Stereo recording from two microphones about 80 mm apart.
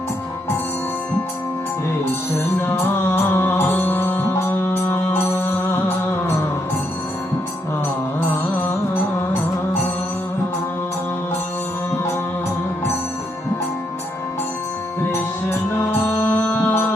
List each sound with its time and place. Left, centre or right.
3.1 s music: left
15.1 s music: left